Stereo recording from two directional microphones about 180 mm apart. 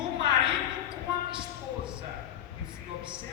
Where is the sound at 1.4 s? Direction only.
5° right (ahead or behind).